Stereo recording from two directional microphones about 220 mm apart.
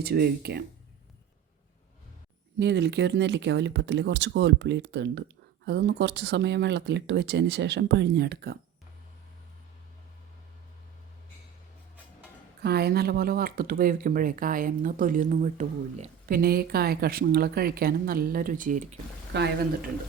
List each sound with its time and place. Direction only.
0.0 s speech: 45° right (ahead or behind)
2.6 s speech: 50° right (ahead or behind)
12.6 s speech: 45° right (ahead or behind)
19.3 s speech: 50° right (ahead or behind)